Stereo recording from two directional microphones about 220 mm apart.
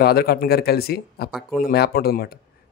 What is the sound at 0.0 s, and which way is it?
A man's voice, 45° left (ahead or behind).